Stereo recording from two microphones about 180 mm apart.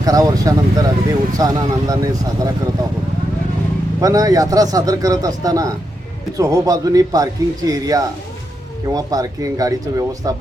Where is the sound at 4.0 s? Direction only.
20° right (ahead or behind).